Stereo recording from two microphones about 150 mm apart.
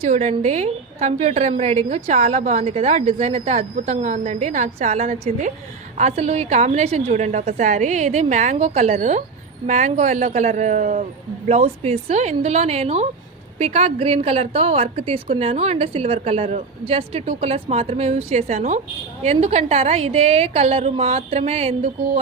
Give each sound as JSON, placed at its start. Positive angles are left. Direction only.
{"t": 0.0, "sound": "a woman's voice", "side_deg": -50}
{"t": 11.4, "sound": "a woman's voice", "side_deg": -45}